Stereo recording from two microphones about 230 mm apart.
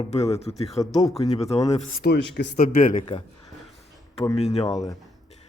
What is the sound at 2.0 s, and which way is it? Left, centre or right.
Speech, left.